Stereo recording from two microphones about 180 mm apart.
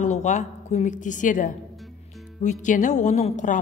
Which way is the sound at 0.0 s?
40° left (ahead or behind).